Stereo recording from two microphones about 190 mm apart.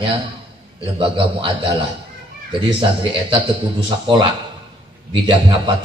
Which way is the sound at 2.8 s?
25° right (ahead or behind).